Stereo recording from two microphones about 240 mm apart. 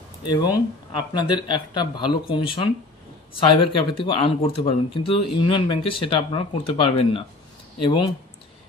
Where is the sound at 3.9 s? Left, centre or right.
Left.